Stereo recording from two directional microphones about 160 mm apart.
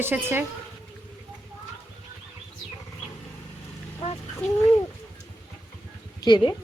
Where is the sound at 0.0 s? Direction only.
15° right (ahead or behind).